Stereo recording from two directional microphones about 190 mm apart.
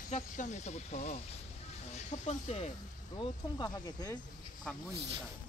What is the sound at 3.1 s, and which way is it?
Speech, 20° left (ahead or behind).